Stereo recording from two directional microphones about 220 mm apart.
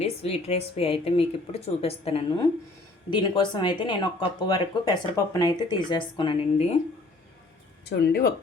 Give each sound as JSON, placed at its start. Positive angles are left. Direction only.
{"t": 0.0, "sound": "speech", "side_deg": 25}
{"t": 7.9, "sound": "speech", "side_deg": 45}